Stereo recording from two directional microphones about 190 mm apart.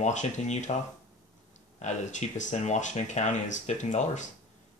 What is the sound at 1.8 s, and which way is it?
Speech, 40° left (ahead or behind).